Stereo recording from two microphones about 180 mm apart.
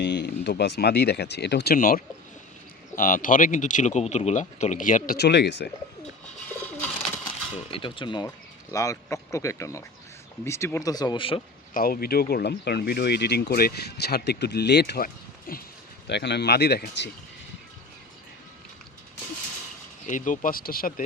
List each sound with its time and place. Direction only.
0.0 s speech: 75° left (ahead or behind); by 5.1 s 50° left (ahead or behind)
5.1 s speech: 70° left (ahead or behind)
7.3 s speech: 30° left (ahead or behind)
11.7 s speech: 55° left (ahead or behind)
16.0 s speech: 70° left (ahead or behind)
20.1 s speech: 45° left (ahead or behind)